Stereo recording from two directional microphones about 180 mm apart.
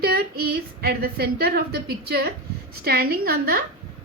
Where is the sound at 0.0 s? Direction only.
55° right (ahead or behind).